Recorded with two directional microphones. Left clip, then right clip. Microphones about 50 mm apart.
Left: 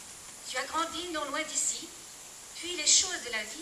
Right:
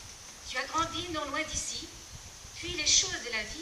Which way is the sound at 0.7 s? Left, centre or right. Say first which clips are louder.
Right 1 dB; centre.